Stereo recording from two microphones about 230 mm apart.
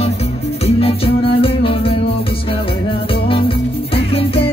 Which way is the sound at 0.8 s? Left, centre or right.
Left.